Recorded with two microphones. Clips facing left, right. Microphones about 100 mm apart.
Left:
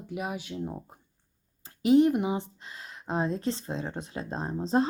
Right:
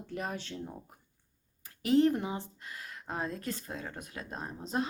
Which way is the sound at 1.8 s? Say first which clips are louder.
Left 5 dB; 20° left (ahead or behind).